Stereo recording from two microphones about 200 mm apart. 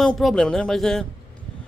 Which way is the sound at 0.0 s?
Centre (ahead or behind).